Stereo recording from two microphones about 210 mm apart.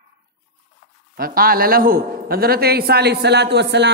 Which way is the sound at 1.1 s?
45° right (ahead or behind).